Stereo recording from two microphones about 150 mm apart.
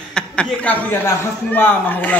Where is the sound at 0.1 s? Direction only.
10° left (ahead or behind).